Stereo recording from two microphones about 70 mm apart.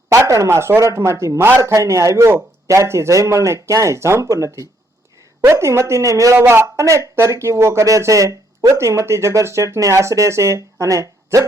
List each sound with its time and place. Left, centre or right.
0.1 s speech: right
1.5 s a man's voice: right
1.7 s speech: right
6.4 s speech: right